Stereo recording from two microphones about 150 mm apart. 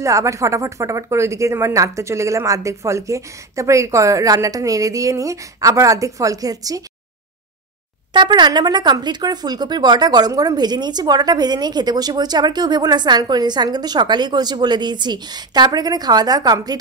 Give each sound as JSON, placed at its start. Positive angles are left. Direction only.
{"t": 0.0, "sound": "speech", "side_deg": -20}
{"t": 8.1, "sound": "speech", "side_deg": -30}